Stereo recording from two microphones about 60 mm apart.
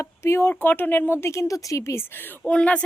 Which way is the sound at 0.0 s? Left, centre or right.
Left.